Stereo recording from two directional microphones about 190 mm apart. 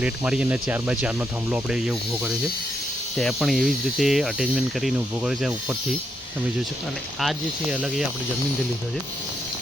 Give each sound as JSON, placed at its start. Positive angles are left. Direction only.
{"t": 0.0, "sound": "snake", "side_deg": -5}
{"t": 7.2, "sound": "snake", "side_deg": -5}